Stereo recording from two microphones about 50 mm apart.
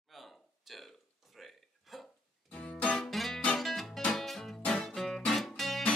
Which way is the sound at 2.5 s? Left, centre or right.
Left.